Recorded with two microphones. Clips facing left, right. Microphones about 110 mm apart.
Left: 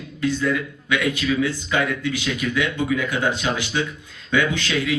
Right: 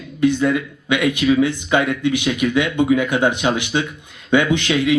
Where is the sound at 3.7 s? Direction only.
30° right (ahead or behind).